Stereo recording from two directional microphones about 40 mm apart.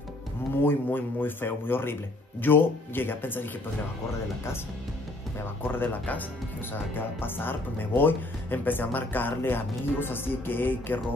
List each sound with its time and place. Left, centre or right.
0.7 s speech: left
5.6 s speech: left
7.0 s speech: left